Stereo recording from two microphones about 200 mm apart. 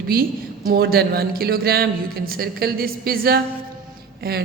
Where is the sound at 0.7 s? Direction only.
50° right (ahead or behind).